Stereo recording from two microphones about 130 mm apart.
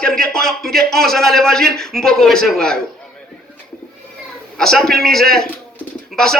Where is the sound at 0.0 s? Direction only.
5° left (ahead or behind).